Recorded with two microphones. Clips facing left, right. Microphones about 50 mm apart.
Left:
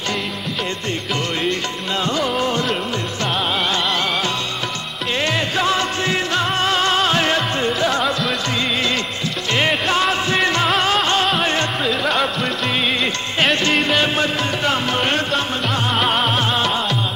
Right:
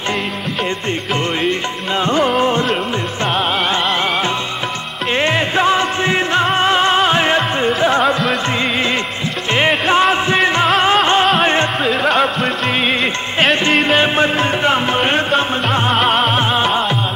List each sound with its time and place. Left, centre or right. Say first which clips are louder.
2.0 s music: right 6 dB; right
5.1 s music: right 5 dB; right
9.5 s music: right 4 dB; right
11.8 s music: right 4 dB; centre
13.8 s music: right 4 dB; right
15.9 s music: right 3 dB; centre
16.3 s music: right 4 dB; right